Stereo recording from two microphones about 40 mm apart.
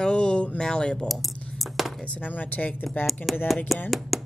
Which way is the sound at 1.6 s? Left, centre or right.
Centre.